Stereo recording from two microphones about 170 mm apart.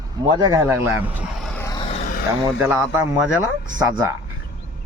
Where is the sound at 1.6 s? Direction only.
20° left (ahead or behind).